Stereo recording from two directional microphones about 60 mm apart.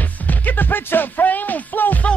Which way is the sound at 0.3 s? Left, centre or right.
Left.